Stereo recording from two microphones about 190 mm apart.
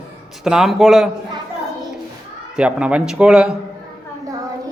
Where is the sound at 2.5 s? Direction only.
5° right (ahead or behind).